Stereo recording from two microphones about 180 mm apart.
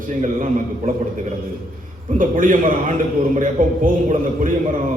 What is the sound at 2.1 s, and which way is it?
A man's voice, 50° right (ahead or behind).